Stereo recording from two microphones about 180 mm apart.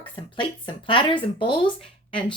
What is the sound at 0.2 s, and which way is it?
Speech, 25° left (ahead or behind).